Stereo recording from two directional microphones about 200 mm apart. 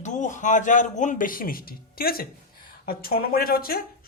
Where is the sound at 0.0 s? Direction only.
40° left (ahead or behind).